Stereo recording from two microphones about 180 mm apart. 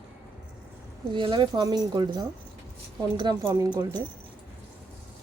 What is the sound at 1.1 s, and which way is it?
Speech, 25° right (ahead or behind).